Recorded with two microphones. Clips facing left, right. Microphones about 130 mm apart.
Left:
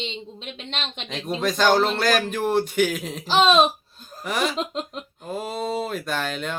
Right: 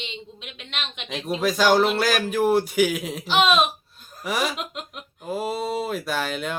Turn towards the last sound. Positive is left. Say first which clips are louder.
# right 1 dB
turn(degrees=-5)  # may be behind; listen again after turning